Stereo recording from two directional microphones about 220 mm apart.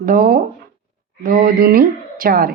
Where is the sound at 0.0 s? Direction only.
40° right (ahead or behind).